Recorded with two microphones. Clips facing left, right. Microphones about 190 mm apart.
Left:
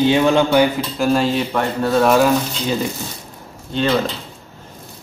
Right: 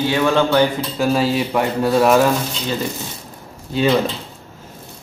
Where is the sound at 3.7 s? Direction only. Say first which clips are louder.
Right 2 dB; 10° right (ahead or behind).